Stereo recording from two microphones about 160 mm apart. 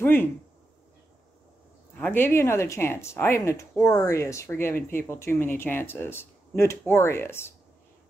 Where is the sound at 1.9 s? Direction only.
10° left (ahead or behind).